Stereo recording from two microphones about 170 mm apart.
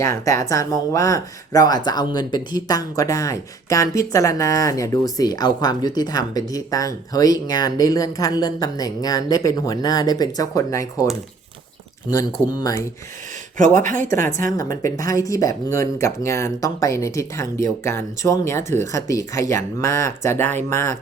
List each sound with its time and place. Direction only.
0.0 s speech: 15° left (ahead or behind)
12.1 s speech: 25° left (ahead or behind)
13.7 s speech: 50° right (ahead or behind)
14.0 s speech: 15° left (ahead or behind)